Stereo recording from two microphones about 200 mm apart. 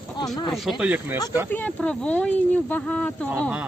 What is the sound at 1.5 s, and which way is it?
Speech, 5° left (ahead or behind).